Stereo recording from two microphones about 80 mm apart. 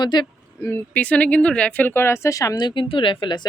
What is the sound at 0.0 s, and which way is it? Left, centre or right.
Speech, left.